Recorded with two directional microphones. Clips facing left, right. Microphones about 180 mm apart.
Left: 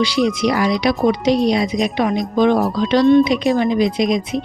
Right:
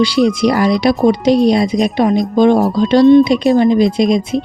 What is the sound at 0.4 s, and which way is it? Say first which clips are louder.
Speech: right 4 dB; 35° right (ahead or behind).